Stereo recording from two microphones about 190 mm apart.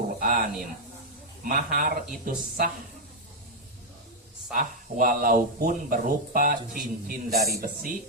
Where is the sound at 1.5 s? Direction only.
50° right (ahead or behind).